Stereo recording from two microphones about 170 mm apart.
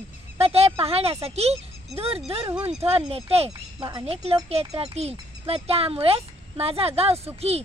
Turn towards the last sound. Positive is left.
turn(degrees=-35)  # may be behind; listen again after turning